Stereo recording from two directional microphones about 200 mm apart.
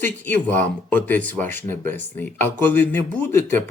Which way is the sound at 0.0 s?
10° left (ahead or behind).